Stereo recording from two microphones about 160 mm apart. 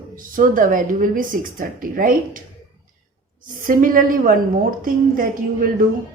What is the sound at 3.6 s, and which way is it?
Speech, 60° right (ahead or behind).